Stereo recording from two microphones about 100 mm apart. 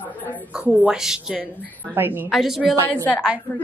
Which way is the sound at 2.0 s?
20° right (ahead or behind).